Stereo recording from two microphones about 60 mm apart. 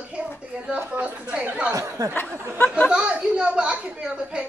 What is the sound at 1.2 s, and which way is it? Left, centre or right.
Speech, right.